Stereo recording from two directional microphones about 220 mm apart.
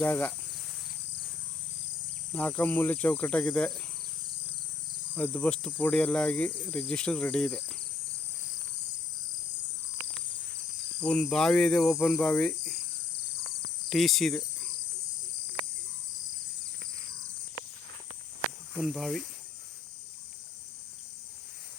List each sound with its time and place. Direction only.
0.0 s speech: 10° left (ahead or behind)
2.3 s speech: 5° left (ahead or behind)
5.1 s cricket: 10° left (ahead or behind)
11.0 s cricket: 5° left (ahead or behind)
13.9 s cricket: centre (ahead or behind)
18.7 s cricket: centre (ahead or behind)